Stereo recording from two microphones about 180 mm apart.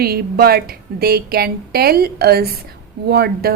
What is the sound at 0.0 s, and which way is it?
A woman's voice, 60° right (ahead or behind).